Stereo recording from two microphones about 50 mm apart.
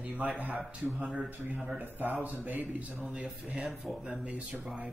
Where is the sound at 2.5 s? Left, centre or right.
Centre.